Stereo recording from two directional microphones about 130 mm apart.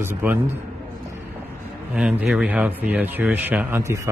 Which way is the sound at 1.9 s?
10° right (ahead or behind).